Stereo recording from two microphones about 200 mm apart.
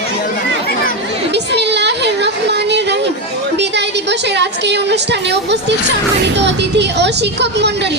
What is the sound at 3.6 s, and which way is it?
A woman's voice, 60° right (ahead or behind).